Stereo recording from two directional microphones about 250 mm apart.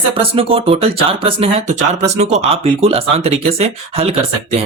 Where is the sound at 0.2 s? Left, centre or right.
Right.